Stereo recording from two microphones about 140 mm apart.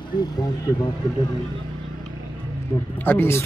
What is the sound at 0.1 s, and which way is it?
Speech, 30° left (ahead or behind).